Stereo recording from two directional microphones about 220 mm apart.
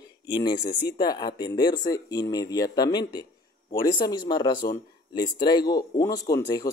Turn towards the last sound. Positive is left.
turn(degrees=15)  # may be behind; listen again after turning